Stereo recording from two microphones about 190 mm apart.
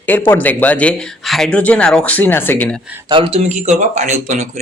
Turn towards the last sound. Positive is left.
turn(degrees=-40)  # may be behind; listen again after turning